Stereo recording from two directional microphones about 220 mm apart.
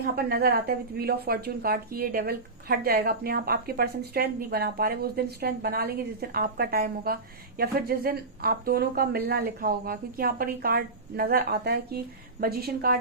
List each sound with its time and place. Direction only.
0.0 s a woman's voice: 45° right (ahead or behind)